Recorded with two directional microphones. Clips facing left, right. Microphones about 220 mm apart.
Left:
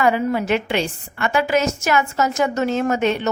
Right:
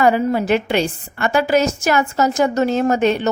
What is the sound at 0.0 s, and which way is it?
A woman's voice, 35° right (ahead or behind).